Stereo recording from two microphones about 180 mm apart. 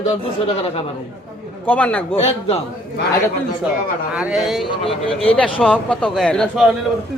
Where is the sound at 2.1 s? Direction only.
35° left (ahead or behind).